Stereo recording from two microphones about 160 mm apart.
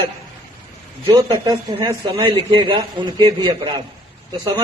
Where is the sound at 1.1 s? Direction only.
25° right (ahead or behind).